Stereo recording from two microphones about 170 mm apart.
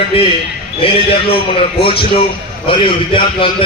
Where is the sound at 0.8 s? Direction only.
35° left (ahead or behind).